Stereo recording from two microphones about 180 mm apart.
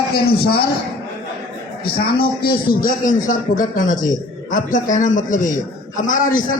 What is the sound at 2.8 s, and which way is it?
A man's voice, 45° left (ahead or behind).